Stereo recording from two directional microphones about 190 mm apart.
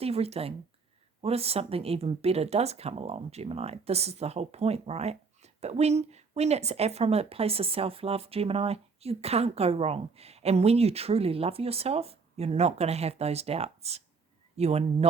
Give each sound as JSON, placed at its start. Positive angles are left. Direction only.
{"t": 0.0, "sound": "speech", "side_deg": -30}